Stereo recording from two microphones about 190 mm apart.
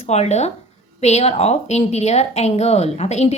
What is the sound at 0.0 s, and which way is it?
Speech, 35° left (ahead or behind).